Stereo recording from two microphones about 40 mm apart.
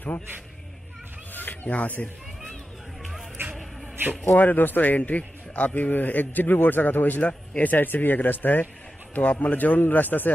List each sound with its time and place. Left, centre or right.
1.3 s music: left
3.4 s music: right
4.4 s a man's voice: left
5.8 s a man's voice: left
9.1 s a man's voice: left
9.8 s a man's voice: left